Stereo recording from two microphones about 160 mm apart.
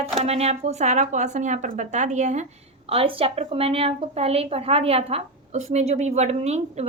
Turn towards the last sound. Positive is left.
turn(degrees=-45)  # may be behind; listen again after turning